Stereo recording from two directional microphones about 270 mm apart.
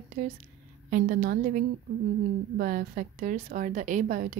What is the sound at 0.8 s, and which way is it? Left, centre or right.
A woman's voice, right.